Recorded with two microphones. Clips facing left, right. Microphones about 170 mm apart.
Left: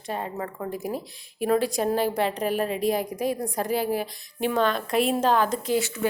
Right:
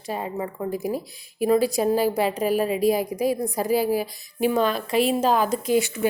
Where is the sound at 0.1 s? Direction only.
10° right (ahead or behind).